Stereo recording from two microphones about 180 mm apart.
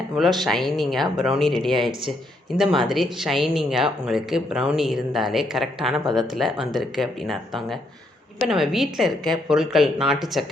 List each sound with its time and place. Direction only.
0.2 s speech: centre (ahead or behind)
6.1 s speech: 25° right (ahead or behind)
6.3 s speech: centre (ahead or behind)